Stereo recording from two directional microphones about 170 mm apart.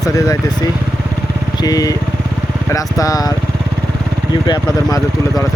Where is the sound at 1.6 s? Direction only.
20° left (ahead or behind).